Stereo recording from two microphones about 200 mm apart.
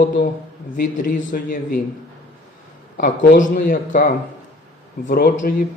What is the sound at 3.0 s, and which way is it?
A man's voice, 40° left (ahead or behind).